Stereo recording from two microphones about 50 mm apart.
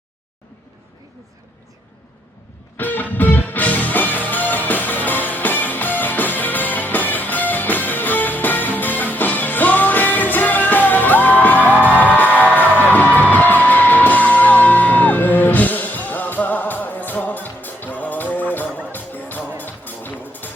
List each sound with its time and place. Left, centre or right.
2.7 s music: left